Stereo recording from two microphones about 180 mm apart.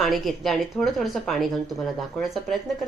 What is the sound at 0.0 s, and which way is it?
Speech, centre (ahead or behind).